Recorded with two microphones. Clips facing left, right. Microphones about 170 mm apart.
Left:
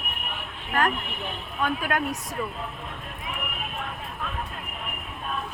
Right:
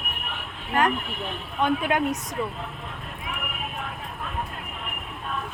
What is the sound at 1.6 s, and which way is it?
Speech, 20° right (ahead or behind).